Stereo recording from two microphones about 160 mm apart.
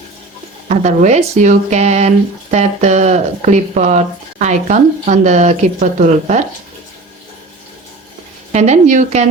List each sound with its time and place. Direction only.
0.7 s speech: 45° right (ahead or behind)
8.5 s speech: 45° right (ahead or behind)